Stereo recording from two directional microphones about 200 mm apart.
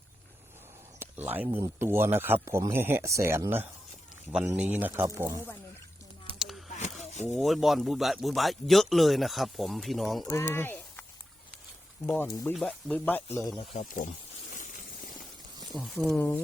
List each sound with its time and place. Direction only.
0.9 s a sound: 10° right (ahead or behind)
1.5 s a man's voice: 20° right (ahead or behind)
6.7 s a sound: 35° left (ahead or behind)
7.3 s a man's voice: centre (ahead or behind)
10.3 s speech: 10° left (ahead or behind)
12.0 s speech: 10° left (ahead or behind)
13.7 s speech: 40° left (ahead or behind)
15.7 s a man's voice: centre (ahead or behind)